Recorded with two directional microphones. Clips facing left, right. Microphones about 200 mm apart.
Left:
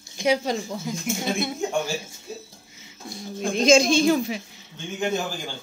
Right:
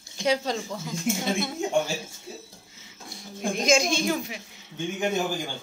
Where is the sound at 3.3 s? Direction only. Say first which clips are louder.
Left 5 dB; 25° left (ahead or behind).